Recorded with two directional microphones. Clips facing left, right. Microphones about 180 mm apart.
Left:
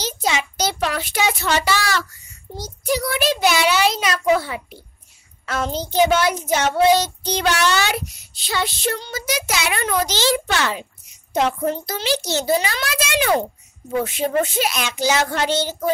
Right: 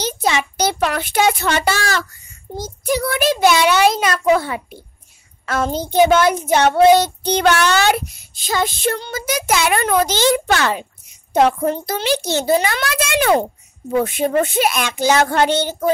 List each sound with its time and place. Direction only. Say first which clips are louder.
0.0 s a child's voice: right 4 dB; 55° right (ahead or behind)
2.5 s child singing: right 2 dB; 50° right (ahead or behind)
11.3 s a child's voice: right 5 dB; 55° right (ahead or behind)